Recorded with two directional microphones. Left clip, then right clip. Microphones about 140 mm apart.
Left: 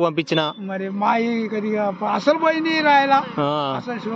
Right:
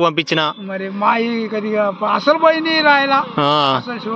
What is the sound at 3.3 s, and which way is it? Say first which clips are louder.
Speech: right 7 dB; 20° right (ahead or behind).